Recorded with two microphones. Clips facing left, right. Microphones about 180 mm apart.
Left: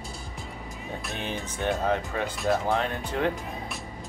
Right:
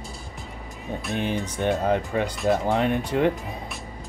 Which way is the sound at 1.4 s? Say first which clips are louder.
Right 1 dB; 15° right (ahead or behind).